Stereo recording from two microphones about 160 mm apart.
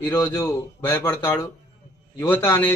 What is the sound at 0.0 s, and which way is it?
A man's voice, 15° left (ahead or behind).